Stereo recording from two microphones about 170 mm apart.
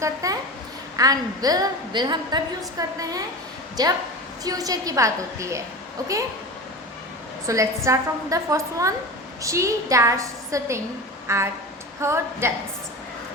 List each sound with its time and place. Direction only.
0.0 s a woman's voice: 20° right (ahead or behind)
7.4 s a woman's voice: 20° right (ahead or behind)